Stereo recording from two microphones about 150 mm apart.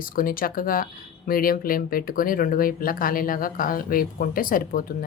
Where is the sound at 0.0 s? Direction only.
70° left (ahead or behind).